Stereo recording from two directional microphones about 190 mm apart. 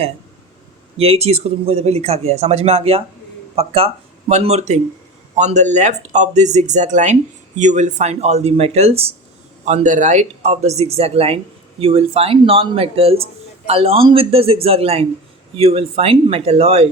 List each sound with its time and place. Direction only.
0.9 s a man's voice: 30° right (ahead or behind)